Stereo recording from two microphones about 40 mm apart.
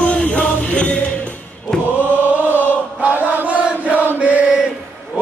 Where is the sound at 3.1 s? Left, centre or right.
Right.